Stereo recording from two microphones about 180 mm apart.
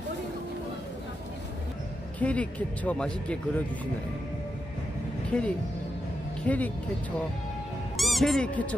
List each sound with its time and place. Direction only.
2.1 s speech: 10° left (ahead or behind)
5.3 s speech: 5° left (ahead or behind)
8.0 s speech: centre (ahead or behind)